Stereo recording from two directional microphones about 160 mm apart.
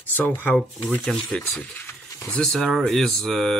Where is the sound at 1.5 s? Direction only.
15° left (ahead or behind).